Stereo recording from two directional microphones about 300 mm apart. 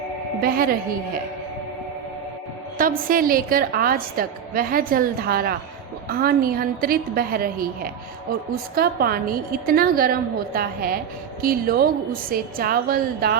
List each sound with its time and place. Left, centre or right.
0.4 s a woman's voice: right
2.7 s a woman's voice: right